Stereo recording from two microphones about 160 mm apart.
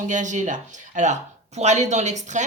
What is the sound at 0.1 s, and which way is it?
Speech, 50° right (ahead or behind).